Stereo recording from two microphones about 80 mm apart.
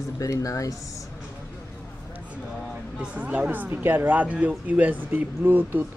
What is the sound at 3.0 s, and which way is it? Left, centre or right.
Speech, centre.